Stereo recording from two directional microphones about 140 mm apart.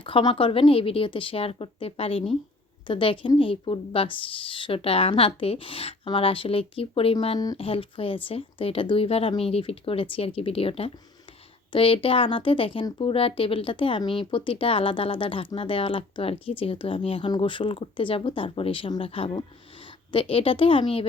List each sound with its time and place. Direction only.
0.0 s speech: 35° left (ahead or behind)